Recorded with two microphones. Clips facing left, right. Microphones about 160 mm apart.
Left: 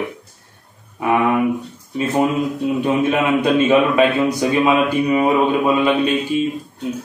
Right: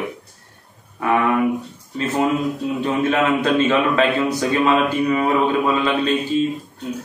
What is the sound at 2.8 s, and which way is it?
A man's voice, 15° left (ahead or behind).